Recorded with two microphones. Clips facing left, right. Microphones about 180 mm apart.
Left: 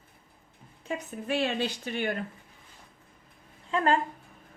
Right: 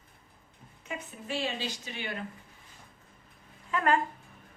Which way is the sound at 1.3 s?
60° left (ahead or behind).